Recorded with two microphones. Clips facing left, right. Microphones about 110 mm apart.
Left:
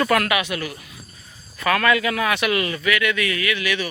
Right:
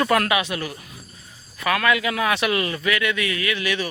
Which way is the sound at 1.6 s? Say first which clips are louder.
Left 2 dB; 10° right (ahead or behind).